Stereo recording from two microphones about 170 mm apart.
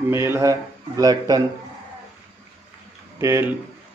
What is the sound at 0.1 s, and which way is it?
A man's voice, 15° right (ahead or behind).